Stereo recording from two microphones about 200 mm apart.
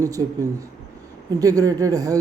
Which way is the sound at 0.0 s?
15° right (ahead or behind).